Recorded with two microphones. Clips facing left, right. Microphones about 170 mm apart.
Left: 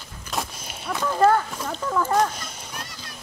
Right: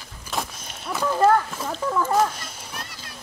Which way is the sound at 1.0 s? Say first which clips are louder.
Even; 5° right (ahead or behind).